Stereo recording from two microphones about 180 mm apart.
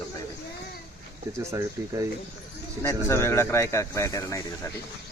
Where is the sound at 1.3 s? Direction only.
15° right (ahead or behind).